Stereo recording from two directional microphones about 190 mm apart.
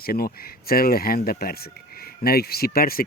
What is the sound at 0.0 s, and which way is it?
Speech, 50° left (ahead or behind).